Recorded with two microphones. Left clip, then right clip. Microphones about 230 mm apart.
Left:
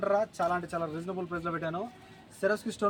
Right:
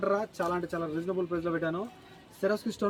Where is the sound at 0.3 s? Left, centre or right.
Centre.